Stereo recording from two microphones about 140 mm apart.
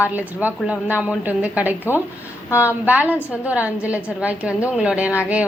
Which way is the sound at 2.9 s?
10° right (ahead or behind).